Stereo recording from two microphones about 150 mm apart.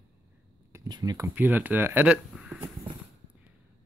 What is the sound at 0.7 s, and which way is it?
Speech, 25° right (ahead or behind).